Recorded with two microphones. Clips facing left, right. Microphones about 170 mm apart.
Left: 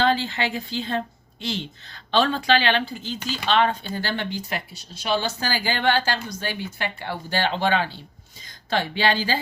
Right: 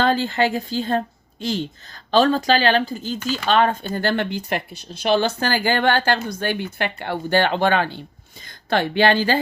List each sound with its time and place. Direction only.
0.0 s a woman's voice: 45° right (ahead or behind)